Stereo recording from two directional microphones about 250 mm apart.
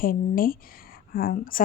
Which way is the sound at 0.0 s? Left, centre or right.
Left.